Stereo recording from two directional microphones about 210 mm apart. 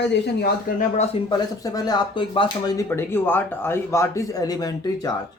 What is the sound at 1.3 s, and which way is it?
Speech, 20° left (ahead or behind).